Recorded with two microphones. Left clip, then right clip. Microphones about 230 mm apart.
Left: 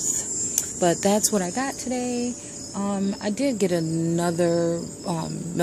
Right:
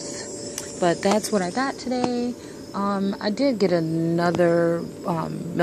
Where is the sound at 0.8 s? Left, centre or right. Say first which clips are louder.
Right 1 dB; centre.